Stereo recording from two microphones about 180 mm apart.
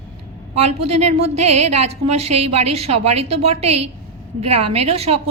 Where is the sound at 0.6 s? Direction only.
35° right (ahead or behind).